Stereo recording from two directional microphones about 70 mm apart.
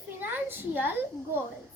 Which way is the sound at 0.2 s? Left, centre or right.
Right.